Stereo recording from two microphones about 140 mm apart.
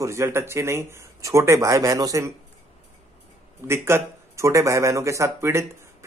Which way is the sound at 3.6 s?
20° right (ahead or behind).